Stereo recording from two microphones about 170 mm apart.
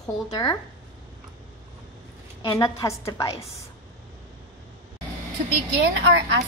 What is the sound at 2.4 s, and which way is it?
Speech, 25° left (ahead or behind).